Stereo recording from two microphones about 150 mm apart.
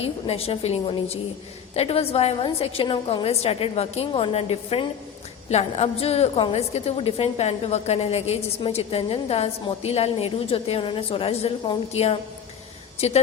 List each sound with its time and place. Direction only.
0.0 s a woman's voice: 40° left (ahead or behind)